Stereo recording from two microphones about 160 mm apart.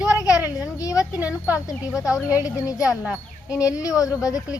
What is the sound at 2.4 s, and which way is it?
Speech, 20° left (ahead or behind).